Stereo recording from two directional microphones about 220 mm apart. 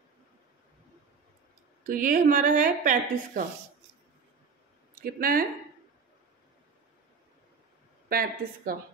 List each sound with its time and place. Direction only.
1.9 s speech: 35° right (ahead or behind)
5.0 s speech: 40° right (ahead or behind)
8.1 s speech: 40° right (ahead or behind)